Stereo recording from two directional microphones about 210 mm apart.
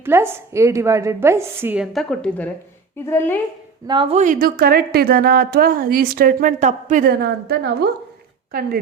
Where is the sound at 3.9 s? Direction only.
25° right (ahead or behind).